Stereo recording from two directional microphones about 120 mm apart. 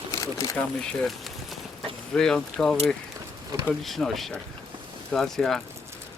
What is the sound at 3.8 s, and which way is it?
Speech, centre (ahead or behind).